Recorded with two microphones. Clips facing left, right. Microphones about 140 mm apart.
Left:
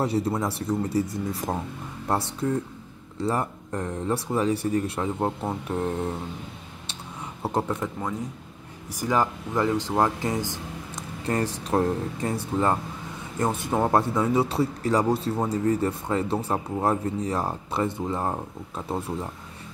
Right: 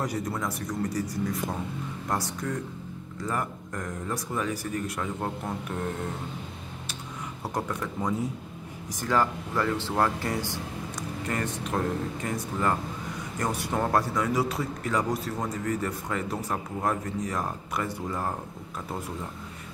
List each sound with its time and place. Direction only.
0.0 s speech: 30° left (ahead or behind)
7.4 s speech: 25° left (ahead or behind)
9.0 s speech: 20° left (ahead or behind)
11.0 s speech: 30° left (ahead or behind)